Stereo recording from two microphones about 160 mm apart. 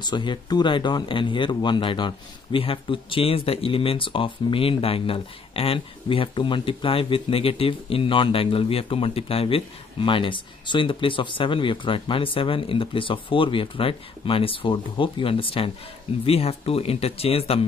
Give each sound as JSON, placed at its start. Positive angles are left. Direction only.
{"t": 0.0, "sound": "speech", "side_deg": 30}